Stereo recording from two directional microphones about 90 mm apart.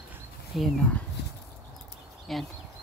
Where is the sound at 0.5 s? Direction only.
Centre (ahead or behind).